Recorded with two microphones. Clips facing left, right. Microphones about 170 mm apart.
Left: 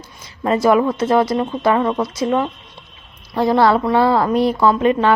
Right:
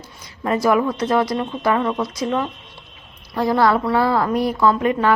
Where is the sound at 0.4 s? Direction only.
25° left (ahead or behind).